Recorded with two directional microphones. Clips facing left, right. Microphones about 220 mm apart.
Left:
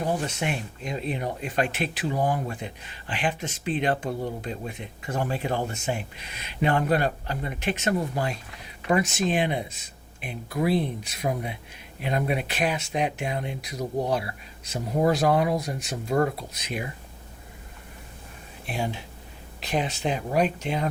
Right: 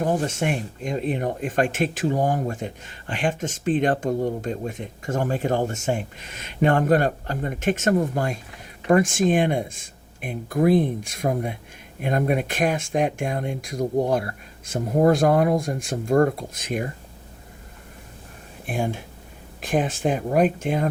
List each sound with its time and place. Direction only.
0.0 s speech: 50° right (ahead or behind)
18.6 s speech: 50° right (ahead or behind)